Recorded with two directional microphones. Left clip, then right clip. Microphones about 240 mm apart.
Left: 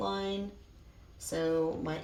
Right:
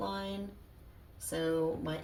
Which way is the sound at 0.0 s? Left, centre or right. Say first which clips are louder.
Left 4 dB; centre.